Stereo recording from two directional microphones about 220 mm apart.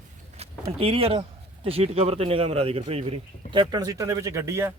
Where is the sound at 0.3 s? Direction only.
25° right (ahead or behind); by 4.7 s 10° right (ahead or behind).